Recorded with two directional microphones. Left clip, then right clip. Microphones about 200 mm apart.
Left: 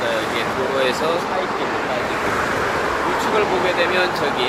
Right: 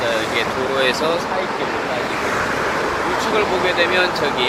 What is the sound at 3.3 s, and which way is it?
Speech, 5° right (ahead or behind).